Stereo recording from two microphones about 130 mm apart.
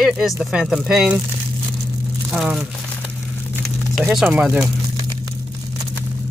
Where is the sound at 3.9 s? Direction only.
5° right (ahead or behind).